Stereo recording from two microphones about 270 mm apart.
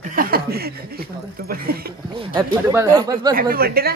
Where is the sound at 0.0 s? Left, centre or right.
Right.